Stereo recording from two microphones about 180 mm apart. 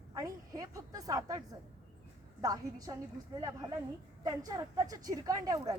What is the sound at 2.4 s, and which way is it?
Speech, 20° right (ahead or behind).